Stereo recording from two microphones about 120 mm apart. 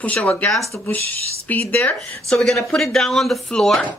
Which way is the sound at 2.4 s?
Centre (ahead or behind).